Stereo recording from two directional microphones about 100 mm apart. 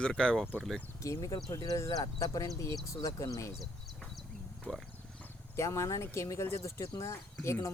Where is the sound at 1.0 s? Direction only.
35° left (ahead or behind).